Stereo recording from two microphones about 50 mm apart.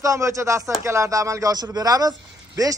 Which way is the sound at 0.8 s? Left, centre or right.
Right.